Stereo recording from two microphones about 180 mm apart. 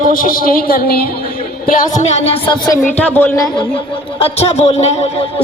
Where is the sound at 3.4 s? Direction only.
25° left (ahead or behind).